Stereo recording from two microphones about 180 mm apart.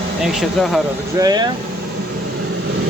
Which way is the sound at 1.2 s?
20° right (ahead or behind).